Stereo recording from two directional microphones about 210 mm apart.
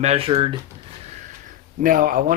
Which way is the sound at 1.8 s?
40° right (ahead or behind).